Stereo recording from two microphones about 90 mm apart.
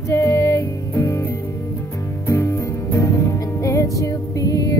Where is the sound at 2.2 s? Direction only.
35° left (ahead or behind).